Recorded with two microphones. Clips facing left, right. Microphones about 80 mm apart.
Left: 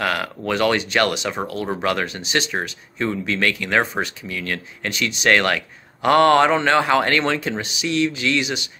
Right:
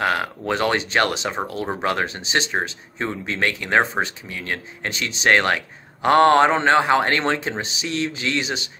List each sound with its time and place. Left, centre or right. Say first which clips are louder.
0.0 s speech: right 1 dB; right